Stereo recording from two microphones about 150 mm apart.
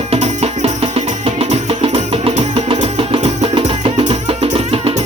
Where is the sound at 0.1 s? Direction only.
45° right (ahead or behind).